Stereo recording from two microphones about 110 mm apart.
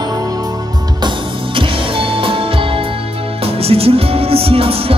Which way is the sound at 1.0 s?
50° right (ahead or behind).